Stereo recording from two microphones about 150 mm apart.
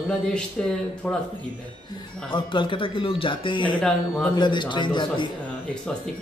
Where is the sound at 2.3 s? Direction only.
35° left (ahead or behind).